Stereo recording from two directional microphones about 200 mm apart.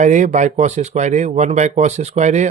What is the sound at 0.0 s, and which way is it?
Speech, 35° right (ahead or behind).